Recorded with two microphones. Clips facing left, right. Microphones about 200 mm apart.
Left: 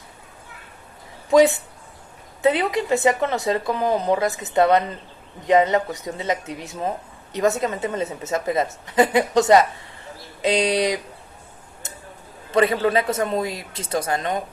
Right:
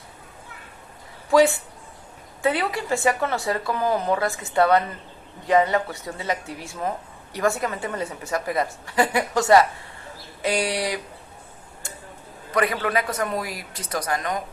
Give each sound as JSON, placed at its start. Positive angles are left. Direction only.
{"t": 1.3, "sound": "speech", "side_deg": 20}
{"t": 11.8, "sound": "a sound", "side_deg": 20}
{"t": 12.5, "sound": "speech", "side_deg": 25}